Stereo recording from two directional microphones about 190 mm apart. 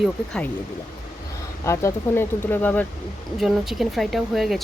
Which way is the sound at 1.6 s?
15° left (ahead or behind).